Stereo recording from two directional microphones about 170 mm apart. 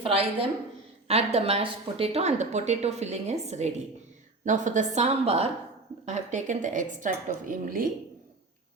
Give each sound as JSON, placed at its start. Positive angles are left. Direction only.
{"t": 0.0, "sound": "a woman's voice", "side_deg": -35}